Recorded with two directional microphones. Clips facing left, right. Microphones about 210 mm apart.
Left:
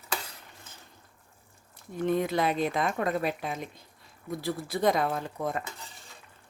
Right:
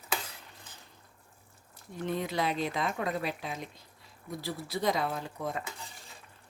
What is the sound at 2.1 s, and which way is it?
Speech, 50° left (ahead or behind).